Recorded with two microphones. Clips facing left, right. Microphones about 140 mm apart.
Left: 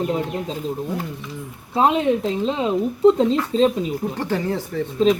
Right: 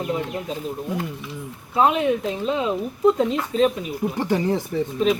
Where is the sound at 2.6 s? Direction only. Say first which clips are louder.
Left 4 dB; 30° left (ahead or behind).